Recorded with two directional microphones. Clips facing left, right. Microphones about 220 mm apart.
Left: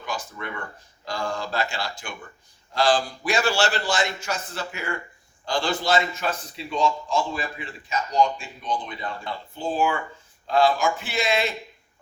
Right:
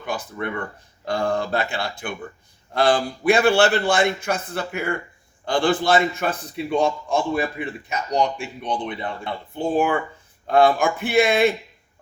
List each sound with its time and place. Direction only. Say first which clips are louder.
0.0 s a man's voice: right 5 dB; 60° right (ahead or behind)